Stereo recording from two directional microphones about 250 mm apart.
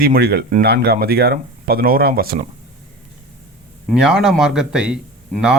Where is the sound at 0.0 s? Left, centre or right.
Right.